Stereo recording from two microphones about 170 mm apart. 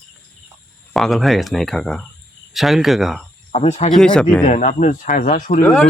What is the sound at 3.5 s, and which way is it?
Speech, 40° left (ahead or behind).